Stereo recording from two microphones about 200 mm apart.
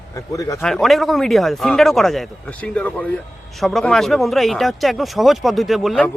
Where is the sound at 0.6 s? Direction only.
Centre (ahead or behind).